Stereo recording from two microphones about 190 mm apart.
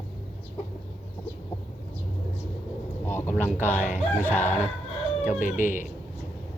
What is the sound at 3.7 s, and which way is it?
Speech, 10° right (ahead or behind).